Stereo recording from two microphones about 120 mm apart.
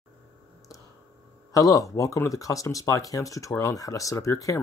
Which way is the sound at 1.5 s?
30° left (ahead or behind).